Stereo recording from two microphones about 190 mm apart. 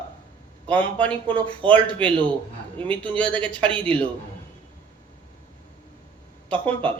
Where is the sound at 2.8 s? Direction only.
5° left (ahead or behind).